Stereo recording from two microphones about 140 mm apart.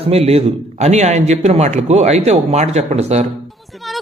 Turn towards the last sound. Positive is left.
turn(degrees=-50)  # may be behind; listen again after turning